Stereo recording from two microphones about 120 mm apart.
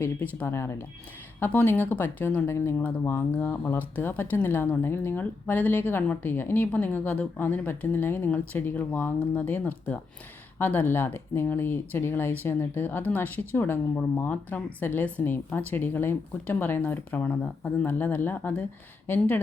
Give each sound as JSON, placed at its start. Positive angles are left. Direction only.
{"t": 0.0, "sound": "speech", "side_deg": 15}